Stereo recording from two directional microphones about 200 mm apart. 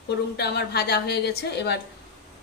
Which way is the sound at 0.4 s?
55° left (ahead or behind).